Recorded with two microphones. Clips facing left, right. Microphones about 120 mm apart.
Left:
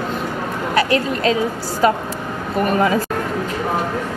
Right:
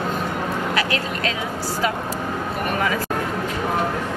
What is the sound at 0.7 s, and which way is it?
Speech, 35° left (ahead or behind).